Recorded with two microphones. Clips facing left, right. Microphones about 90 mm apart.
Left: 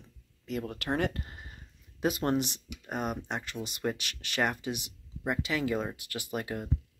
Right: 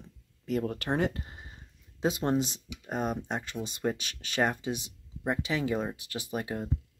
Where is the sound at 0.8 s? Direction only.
20° right (ahead or behind).